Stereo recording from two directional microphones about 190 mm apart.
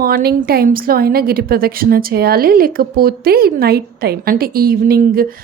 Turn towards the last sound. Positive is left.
turn(degrees=-50)  # may be behind; listen again after turning